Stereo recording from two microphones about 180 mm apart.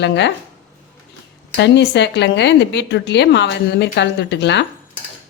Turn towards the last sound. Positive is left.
turn(degrees=75)  # may be behind; listen again after turning